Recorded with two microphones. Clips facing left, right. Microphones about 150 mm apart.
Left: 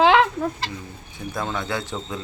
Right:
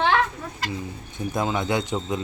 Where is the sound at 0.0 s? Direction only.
90° left.